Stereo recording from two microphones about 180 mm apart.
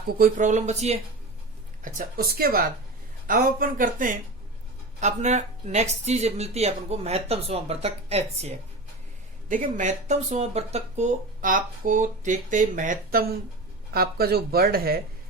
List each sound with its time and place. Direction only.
0.1 s speech: 50° right (ahead or behind)
1.8 s speech: 50° right (ahead or behind)